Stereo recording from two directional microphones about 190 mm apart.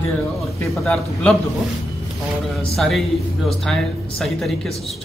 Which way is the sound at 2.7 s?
Centre (ahead or behind).